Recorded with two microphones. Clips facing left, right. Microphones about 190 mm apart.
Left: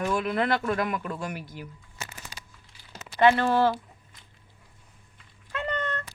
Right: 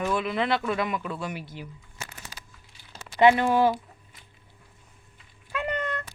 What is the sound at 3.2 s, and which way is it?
Speech, 15° right (ahead or behind).